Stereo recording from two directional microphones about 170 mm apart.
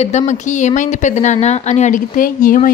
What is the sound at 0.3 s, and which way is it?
A woman's voice, 45° left (ahead or behind).